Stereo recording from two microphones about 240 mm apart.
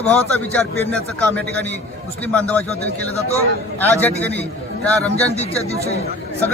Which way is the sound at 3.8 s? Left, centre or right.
Centre.